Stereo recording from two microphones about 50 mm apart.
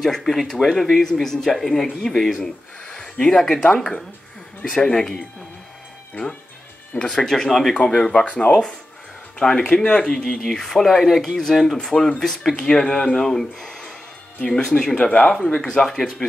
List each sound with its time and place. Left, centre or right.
0.0 s speech: centre
4.7 s speech: centre
7.1 s speech: centre
9.4 s speech: left
9.8 s speech: centre
12.2 s speech: centre
12.5 s speech: centre